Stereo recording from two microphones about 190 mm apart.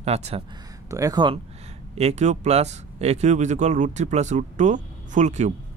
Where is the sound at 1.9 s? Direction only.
35° right (ahead or behind).